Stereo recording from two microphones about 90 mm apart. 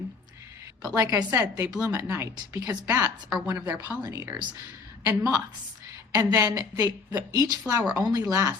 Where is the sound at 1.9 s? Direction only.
25° right (ahead or behind).